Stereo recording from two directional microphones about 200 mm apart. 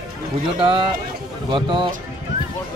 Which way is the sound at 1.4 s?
25° right (ahead or behind).